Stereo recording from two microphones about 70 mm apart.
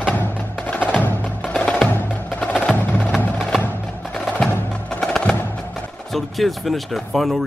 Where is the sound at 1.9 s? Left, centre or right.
Left.